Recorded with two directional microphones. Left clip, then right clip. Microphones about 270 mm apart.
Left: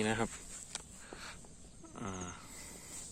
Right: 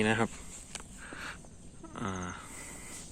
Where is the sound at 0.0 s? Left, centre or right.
Centre.